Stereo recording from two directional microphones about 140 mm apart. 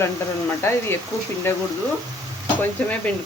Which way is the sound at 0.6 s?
20° left (ahead or behind).